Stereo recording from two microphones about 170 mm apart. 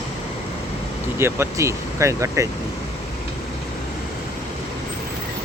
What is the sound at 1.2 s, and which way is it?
Speech, 15° right (ahead or behind).